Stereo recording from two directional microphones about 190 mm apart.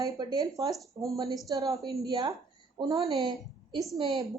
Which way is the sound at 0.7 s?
Centre (ahead or behind).